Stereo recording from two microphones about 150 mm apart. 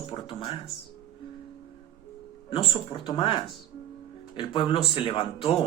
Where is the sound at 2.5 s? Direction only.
35° left (ahead or behind).